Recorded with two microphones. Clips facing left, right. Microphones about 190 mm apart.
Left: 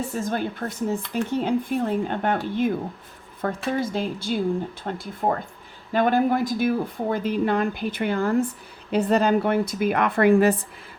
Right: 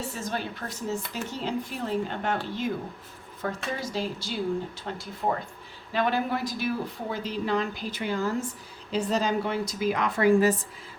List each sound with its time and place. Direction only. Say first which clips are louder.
0.1 s speech: left 6 dB; 50° left (ahead or behind)